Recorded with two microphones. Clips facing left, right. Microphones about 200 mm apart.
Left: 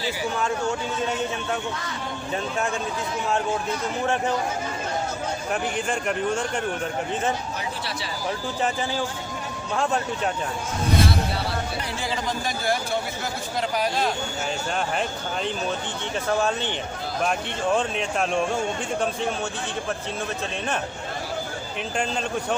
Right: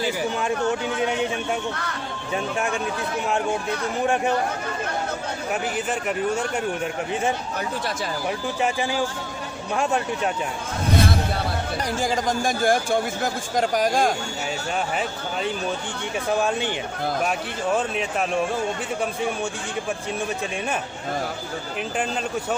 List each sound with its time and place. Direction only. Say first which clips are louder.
5.7 s speech: even; 5° right (ahead or behind)
9.7 s speech: right 1 dB; 15° right (ahead or behind)
11.9 s speech: right 6 dB; 45° right (ahead or behind)
16.4 s speech: right 1 dB; 10° right (ahead or behind)